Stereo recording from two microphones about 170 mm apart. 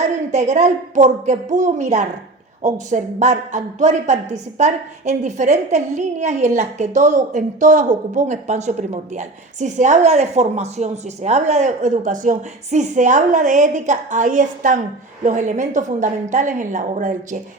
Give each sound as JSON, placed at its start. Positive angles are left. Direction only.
{"t": 0.0, "sound": "speech", "side_deg": -40}